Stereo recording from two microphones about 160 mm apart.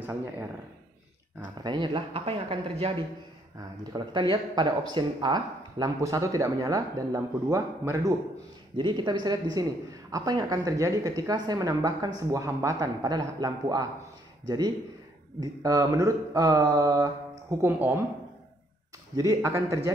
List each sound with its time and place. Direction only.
0.0 s speech: 15° right (ahead or behind)
1.6 s speech: 30° right (ahead or behind)
8.7 s speech: 30° right (ahead or behind)
15.4 s speech: 20° right (ahead or behind)
19.1 s speech: 20° right (ahead or behind)